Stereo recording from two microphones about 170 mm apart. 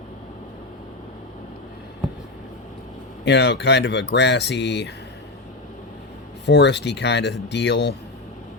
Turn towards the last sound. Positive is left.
turn(degrees=90)